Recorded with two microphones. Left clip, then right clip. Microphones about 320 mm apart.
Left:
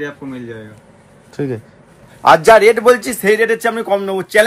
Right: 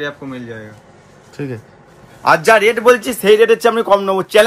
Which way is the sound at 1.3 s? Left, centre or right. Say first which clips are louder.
Left 4 dB; left.